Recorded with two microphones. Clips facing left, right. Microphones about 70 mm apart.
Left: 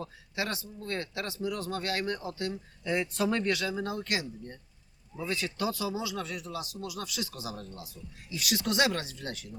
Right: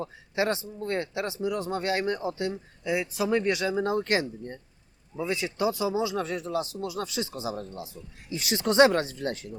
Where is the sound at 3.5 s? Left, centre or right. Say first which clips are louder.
Right 5 dB; right.